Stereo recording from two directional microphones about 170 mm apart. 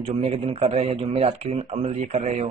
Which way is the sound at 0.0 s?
35° right (ahead or behind).